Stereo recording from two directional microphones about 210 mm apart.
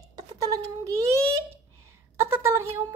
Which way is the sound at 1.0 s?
15° right (ahead or behind).